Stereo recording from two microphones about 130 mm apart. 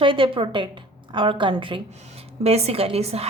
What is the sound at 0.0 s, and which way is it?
Speech, 40° right (ahead or behind).